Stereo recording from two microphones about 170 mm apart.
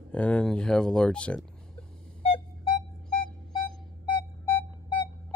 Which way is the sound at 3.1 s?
60° right (ahead or behind).